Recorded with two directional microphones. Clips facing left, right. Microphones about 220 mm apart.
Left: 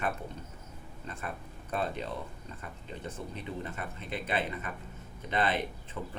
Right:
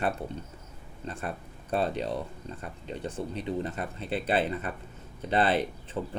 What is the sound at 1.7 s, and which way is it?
Speech, 35° right (ahead or behind).